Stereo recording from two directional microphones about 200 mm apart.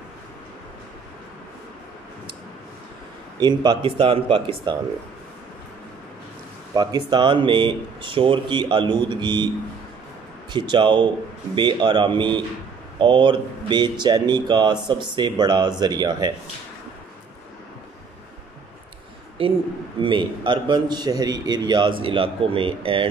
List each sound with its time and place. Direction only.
3.3 s a man's voice: 20° right (ahead or behind)
6.7 s a man's voice: 20° right (ahead or behind)
10.5 s a man's voice: 25° right (ahead or behind)
19.4 s a man's voice: 25° right (ahead or behind)